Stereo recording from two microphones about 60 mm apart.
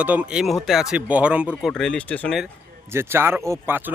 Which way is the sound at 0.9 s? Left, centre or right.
Right.